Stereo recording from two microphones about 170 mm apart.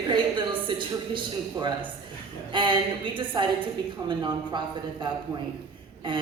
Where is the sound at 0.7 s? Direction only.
30° right (ahead or behind).